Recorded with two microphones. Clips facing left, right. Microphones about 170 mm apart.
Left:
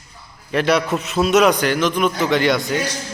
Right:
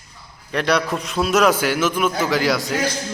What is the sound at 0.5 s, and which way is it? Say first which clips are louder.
A man's voice: left 2 dB; 5° left (ahead or behind).